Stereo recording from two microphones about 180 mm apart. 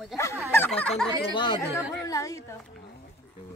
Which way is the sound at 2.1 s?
20° left (ahead or behind).